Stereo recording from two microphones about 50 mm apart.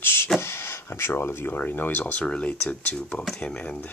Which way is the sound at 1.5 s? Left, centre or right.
Left.